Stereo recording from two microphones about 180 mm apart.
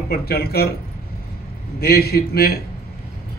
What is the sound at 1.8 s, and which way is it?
Speech, 60° left (ahead or behind).